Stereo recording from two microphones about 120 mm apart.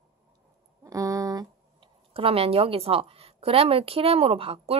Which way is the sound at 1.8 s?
50° right (ahead or behind).